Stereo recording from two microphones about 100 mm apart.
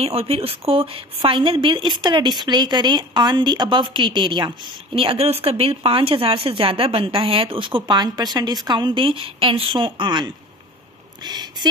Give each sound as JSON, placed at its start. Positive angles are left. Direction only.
{"t": 0.0, "sound": "a woman's voice", "side_deg": -85}
{"t": 4.9, "sound": "a woman's voice", "side_deg": -70}